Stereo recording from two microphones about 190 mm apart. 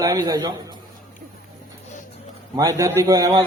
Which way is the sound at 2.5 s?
20° right (ahead or behind).